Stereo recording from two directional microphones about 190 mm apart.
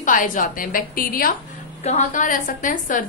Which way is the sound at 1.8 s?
35° left (ahead or behind).